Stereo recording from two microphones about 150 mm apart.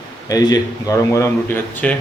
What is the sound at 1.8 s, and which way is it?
Speech, 10° left (ahead or behind).